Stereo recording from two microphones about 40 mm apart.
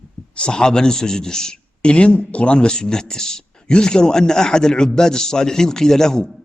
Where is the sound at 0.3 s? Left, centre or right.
Left.